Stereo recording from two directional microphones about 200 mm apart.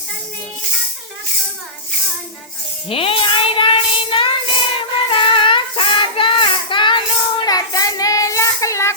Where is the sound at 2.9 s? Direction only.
25° left (ahead or behind).